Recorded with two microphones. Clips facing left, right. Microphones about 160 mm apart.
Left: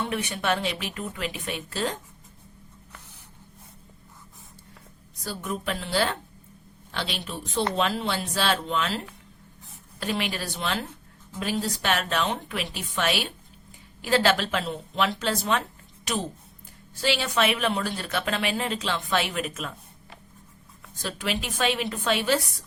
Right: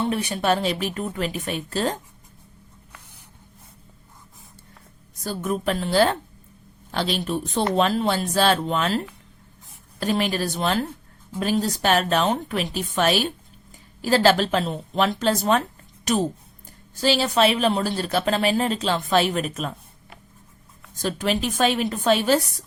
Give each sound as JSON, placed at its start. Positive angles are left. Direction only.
{"t": 0.0, "sound": "speech", "side_deg": -35}
{"t": 5.2, "sound": "speech", "side_deg": -45}
{"t": 10.0, "sound": "speech", "side_deg": -40}
{"t": 16.9, "sound": "speech", "side_deg": -40}
{"t": 21.0, "sound": "speech", "side_deg": -45}